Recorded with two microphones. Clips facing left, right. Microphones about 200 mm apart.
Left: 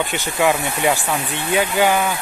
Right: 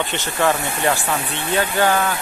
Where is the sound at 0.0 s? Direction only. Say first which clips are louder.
Left 1 dB; 10° left (ahead or behind).